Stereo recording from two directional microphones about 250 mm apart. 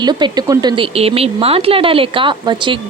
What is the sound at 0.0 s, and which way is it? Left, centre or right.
Speech, centre.